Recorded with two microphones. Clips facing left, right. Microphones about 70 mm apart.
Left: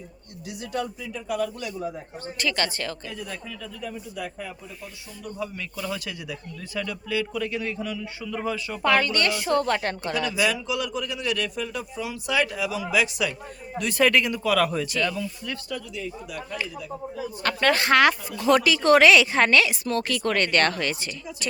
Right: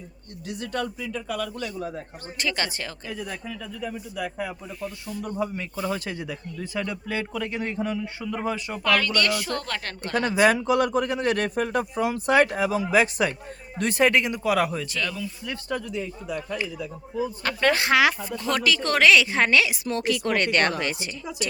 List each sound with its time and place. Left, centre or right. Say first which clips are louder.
0.4 s speech: right 1 dB; centre
2.4 s a woman's voice: left 1 dB; right
5.4 s a man's voice: right 2 dB; right
8.8 s a woman's voice: left 1 dB; left
10.2 s a man's voice: right 7 dB; right
14.7 s speech: left 3 dB; centre
15.7 s a man's voice: right 7 dB; right
17.4 s speech: left 2 dB; centre
18.4 s a woman's voice: left 6 dB; centre